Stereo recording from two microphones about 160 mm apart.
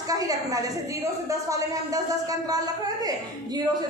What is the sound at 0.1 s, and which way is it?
A woman's voice, 20° right (ahead or behind).